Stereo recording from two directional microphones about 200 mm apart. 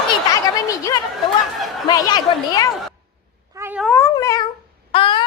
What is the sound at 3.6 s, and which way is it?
Cat, 10° right (ahead or behind).